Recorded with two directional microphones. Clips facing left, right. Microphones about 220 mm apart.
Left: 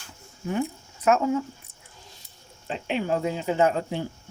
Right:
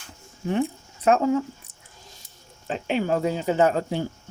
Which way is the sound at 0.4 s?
30° right (ahead or behind).